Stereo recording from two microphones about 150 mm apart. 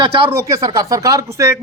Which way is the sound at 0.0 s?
35° right (ahead or behind).